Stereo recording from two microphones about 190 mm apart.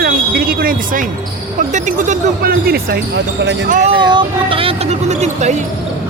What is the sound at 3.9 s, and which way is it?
Speech, 25° right (ahead or behind).